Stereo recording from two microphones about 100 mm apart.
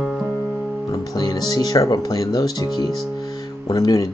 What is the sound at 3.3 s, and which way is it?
Music, 40° left (ahead or behind).